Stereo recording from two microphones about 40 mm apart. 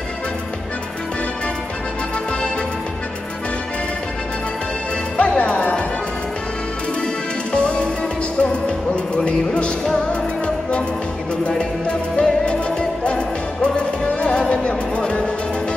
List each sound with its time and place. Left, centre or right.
5.1 s music: left
7.5 s music: left
11.5 s music: left